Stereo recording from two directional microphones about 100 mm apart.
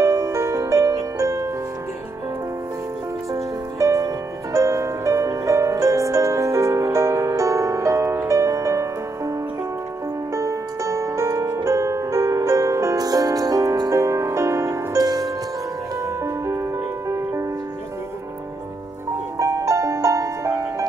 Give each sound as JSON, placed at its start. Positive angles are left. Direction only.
{"t": 0.0, "sound": "music", "side_deg": -30}
{"t": 3.8, "sound": "music", "side_deg": -30}
{"t": 10.3, "sound": "music", "side_deg": -30}
{"t": 19.3, "sound": "music", "side_deg": -30}